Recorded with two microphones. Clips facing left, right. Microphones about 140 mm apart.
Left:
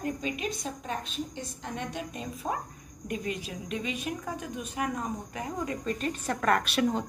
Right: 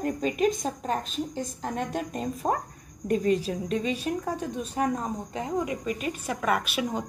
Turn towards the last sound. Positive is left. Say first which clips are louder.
# left 2 dB
turn(degrees=-5)  # may be behind; listen again after turning